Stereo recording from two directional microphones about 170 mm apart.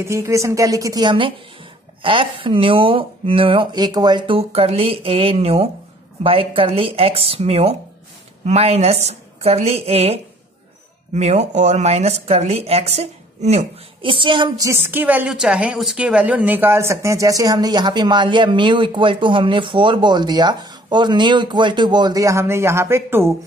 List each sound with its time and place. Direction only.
0.0 s a woman's voice: 15° right (ahead or behind)
14.7 s a woman's voice: 10° right (ahead or behind)